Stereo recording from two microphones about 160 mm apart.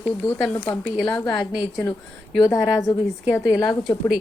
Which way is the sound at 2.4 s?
25° left (ahead or behind).